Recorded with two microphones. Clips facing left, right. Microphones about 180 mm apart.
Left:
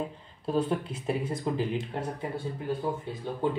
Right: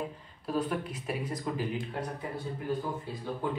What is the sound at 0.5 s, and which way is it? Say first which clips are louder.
Speech: left 3 dB; 25° left (ahead or behind).